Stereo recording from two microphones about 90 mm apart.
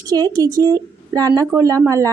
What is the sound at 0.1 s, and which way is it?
A woman's voice, 45° right (ahead or behind).